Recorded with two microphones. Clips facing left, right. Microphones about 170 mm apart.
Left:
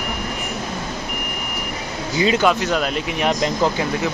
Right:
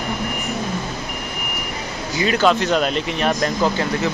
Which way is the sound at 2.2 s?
20° left (ahead or behind).